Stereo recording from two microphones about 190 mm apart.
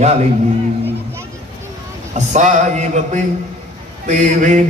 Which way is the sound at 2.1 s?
40° right (ahead or behind).